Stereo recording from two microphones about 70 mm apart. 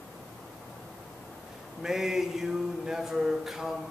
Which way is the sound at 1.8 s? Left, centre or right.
Centre.